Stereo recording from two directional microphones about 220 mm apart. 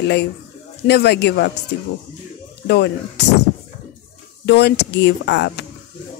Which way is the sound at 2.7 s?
50° left (ahead or behind).